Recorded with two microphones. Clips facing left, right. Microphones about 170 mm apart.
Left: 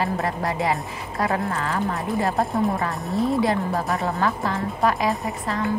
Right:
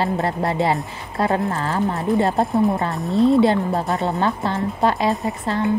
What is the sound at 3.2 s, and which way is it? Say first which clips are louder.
Speech: right 7 dB; 25° right (ahead or behind).